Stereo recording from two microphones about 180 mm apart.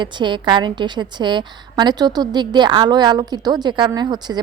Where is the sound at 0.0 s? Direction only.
25° right (ahead or behind).